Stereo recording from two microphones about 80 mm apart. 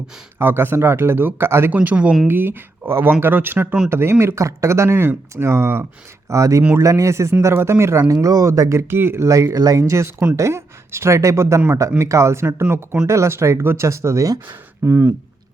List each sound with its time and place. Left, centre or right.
0.3 s speech: right
1.7 s speech: centre; by 12.5 s right
12.5 s speech: right
13.1 s speech: right
14.4 s speech: right